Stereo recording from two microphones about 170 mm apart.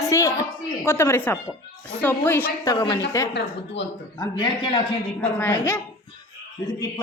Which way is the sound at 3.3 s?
90° left.